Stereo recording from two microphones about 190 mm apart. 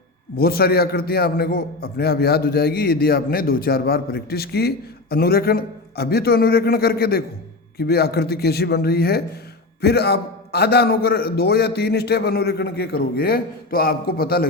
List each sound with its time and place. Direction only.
0.3 s a man's voice: 55° left (ahead or behind)